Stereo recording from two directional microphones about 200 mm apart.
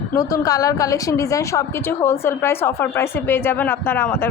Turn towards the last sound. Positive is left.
turn(degrees=10)  # may be behind; listen again after turning